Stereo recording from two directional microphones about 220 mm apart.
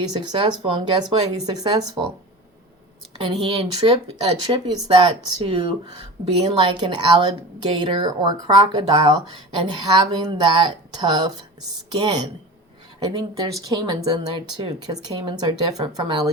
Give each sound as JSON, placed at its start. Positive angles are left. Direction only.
{"t": 0.1, "sound": "speech", "side_deg": -20}
{"t": 3.4, "sound": "speech", "side_deg": -25}
{"t": 13.0, "sound": "speech", "side_deg": -20}